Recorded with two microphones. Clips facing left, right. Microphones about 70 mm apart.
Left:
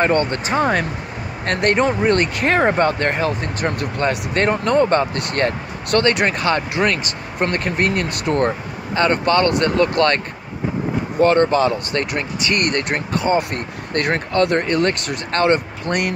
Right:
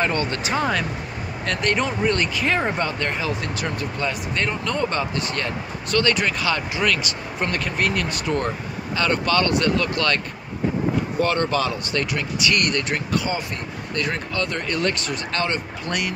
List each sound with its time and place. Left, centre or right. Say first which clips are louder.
0.0 s speech: left 5 dB; left
5.1 s speech: left 5 dB; left
13.4 s speech: left 6 dB; left